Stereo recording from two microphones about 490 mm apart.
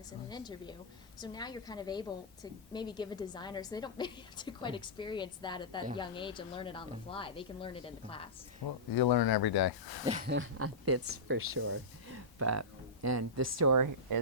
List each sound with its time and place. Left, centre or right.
0.3 s a woman's voice: centre
8.6 s speech: left
10.1 s speech: centre; by 14.2 s right